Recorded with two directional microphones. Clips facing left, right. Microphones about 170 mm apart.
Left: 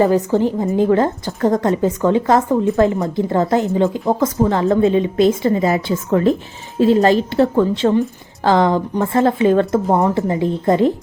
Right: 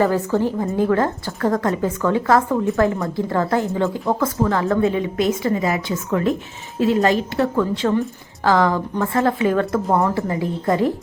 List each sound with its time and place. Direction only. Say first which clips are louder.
0.0 s a woman's voice: left 4 dB; 20° left (ahead or behind)